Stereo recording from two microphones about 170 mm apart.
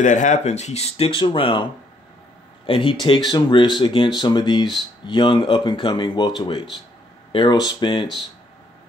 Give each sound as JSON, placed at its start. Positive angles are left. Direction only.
{"t": 0.0, "sound": "speech", "side_deg": 45}